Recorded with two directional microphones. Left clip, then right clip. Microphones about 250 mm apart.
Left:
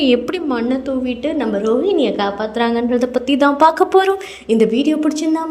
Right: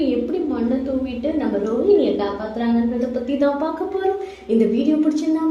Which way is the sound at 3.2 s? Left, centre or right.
Left.